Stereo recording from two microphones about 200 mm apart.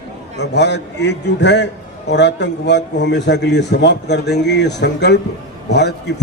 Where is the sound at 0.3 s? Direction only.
55° left (ahead or behind).